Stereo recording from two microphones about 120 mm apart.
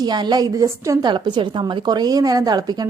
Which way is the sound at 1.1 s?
40° right (ahead or behind).